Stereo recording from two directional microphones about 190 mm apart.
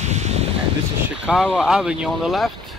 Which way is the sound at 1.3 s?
5° right (ahead or behind).